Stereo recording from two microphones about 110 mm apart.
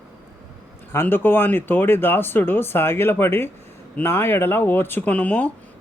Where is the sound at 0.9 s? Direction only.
20° left (ahead or behind).